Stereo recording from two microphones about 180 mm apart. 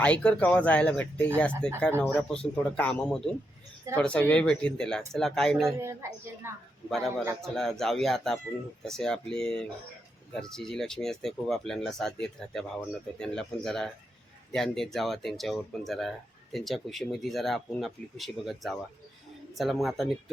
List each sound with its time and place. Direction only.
0.0 s speech: 5° left (ahead or behind)
5.8 s speech: 15° right (ahead or behind)
7.4 s speech: centre (ahead or behind)